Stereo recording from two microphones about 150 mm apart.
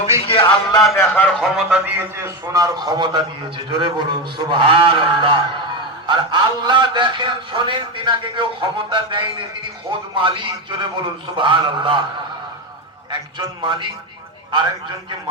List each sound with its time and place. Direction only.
0.0 s a sound: 40° left (ahead or behind)
0.9 s speech: 10° left (ahead or behind)
1.8 s a man's voice: 15° right (ahead or behind); by 12.0 s 30° right (ahead or behind)
13.6 s a man's voice: 30° right (ahead or behind)